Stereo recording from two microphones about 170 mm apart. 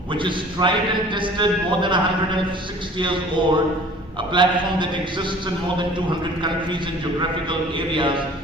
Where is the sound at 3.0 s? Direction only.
30° right (ahead or behind).